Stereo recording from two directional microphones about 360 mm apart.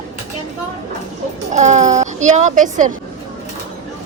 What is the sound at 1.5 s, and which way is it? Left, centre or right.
A child's voice, centre.